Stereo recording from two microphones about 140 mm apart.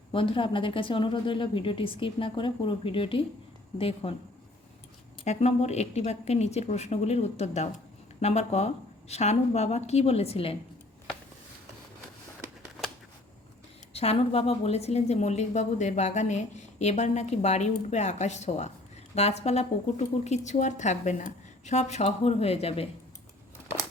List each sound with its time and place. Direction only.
0.1 s a woman's voice: 40° left (ahead or behind)
5.2 s a woman's voice: 50° left (ahead or behind)
13.9 s a woman's voice: 45° left (ahead or behind)